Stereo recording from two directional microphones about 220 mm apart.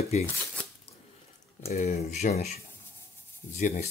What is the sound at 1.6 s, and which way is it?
Speech, 35° left (ahead or behind).